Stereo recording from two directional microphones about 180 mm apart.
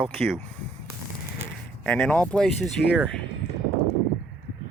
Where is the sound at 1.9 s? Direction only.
5° left (ahead or behind).